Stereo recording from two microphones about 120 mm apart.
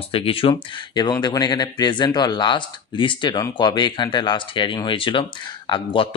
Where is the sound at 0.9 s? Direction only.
35° left (ahead or behind).